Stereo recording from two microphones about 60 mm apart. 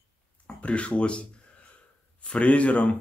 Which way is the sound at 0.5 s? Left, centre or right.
Left.